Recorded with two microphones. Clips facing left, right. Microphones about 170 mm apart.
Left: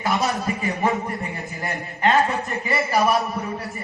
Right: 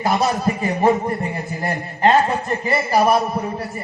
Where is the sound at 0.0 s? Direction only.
40° right (ahead or behind).